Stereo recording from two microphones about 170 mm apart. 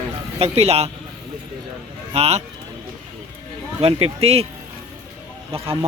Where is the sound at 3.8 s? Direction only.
35° right (ahead or behind).